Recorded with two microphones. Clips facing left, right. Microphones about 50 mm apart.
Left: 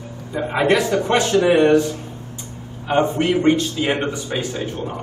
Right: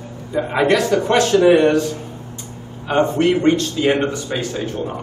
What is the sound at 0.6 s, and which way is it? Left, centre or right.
A man's voice, centre.